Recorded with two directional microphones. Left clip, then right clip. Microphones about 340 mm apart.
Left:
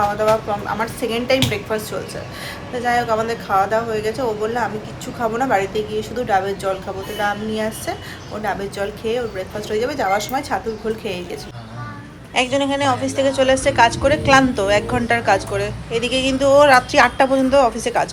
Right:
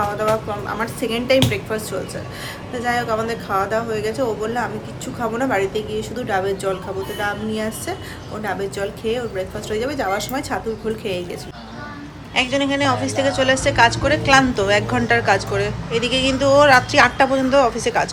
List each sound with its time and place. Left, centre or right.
0.8 s a woman's voice: centre